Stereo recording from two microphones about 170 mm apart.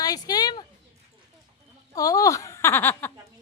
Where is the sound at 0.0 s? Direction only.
20° left (ahead or behind).